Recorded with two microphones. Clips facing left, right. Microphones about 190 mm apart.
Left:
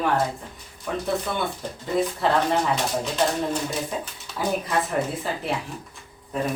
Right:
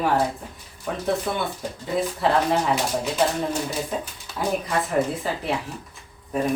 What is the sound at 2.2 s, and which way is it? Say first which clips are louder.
Speech: right 3 dB; centre (ahead or behind).